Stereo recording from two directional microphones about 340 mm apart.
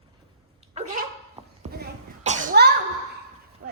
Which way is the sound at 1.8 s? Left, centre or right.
Right.